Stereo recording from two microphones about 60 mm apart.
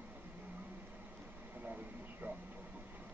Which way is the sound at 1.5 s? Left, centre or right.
Right.